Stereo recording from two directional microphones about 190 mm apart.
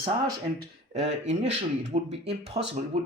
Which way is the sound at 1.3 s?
40° right (ahead or behind).